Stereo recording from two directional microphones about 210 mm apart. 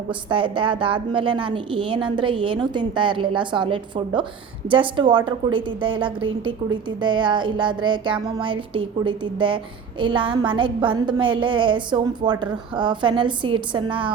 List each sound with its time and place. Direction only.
0.1 s a woman's voice: 25° right (ahead or behind)